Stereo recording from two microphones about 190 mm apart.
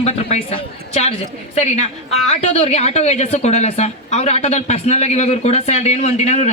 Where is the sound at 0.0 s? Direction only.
35° left (ahead or behind).